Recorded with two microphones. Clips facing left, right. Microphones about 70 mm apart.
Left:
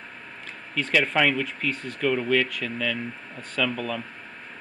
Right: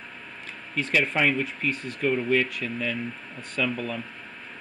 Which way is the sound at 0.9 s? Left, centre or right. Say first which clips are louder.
Left 1 dB; left.